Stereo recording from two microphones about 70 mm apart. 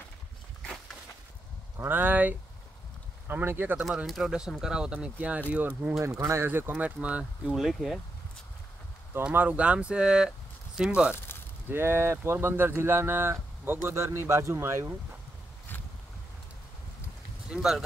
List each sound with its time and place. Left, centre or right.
1.8 s speech: right
4.0 s speech: centre
5.9 s speech: right
6.4 s speech: right
7.0 s speech: centre
7.5 s speech: centre
9.3 s speech: right
11.7 s speech: right
17.5 s speech: centre